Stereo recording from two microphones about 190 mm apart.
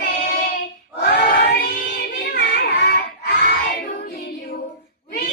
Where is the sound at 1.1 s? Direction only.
55° left (ahead or behind).